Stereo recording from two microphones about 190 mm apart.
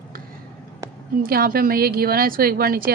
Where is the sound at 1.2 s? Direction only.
50° right (ahead or behind).